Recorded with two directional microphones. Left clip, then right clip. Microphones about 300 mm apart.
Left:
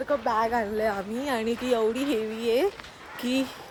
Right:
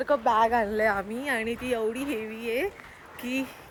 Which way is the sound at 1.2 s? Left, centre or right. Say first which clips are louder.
Left 3 dB; centre.